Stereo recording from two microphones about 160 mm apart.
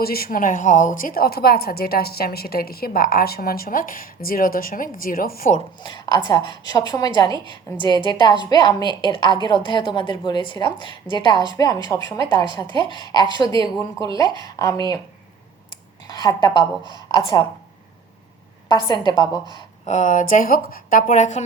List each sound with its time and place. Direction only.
0.0 s a woman's voice: 70° left (ahead or behind)
5.8 s a woman's voice: 30° left (ahead or behind)
18.7 s a woman's voice: 30° left (ahead or behind)
19.8 s speech: 50° left (ahead or behind)